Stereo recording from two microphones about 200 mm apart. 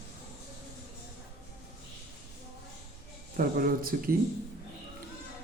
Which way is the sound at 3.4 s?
45° right (ahead or behind).